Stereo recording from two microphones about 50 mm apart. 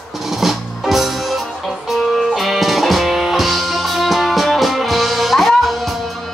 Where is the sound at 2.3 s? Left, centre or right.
Centre.